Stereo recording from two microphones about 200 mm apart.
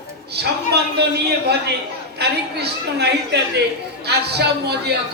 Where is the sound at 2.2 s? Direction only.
55° right (ahead or behind).